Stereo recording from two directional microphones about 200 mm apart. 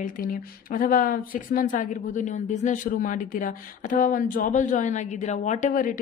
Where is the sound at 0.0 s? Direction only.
45° left (ahead or behind).